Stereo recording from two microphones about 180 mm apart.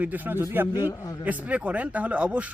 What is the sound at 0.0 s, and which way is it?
Speech, 10° right (ahead or behind).